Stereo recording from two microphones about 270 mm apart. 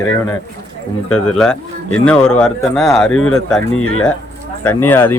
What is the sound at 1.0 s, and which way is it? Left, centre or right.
Speech, left.